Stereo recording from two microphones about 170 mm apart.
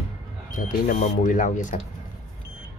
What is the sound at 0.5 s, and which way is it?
Speech, 50° left (ahead or behind).